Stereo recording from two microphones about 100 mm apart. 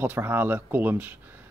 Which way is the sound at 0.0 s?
20° right (ahead or behind).